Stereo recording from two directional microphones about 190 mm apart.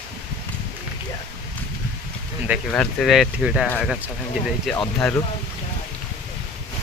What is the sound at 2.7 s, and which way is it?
Speech, 5° left (ahead or behind).